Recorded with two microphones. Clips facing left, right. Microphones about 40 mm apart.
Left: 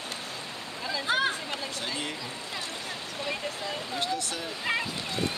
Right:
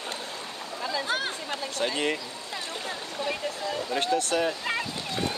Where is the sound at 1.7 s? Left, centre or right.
Right.